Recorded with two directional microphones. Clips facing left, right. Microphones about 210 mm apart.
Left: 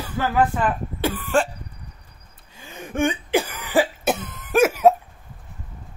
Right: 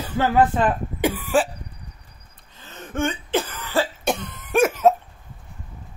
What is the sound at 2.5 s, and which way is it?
Cough, 10° left (ahead or behind).